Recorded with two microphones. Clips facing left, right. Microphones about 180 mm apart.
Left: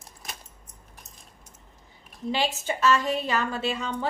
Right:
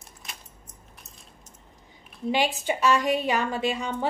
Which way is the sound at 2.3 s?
15° right (ahead or behind).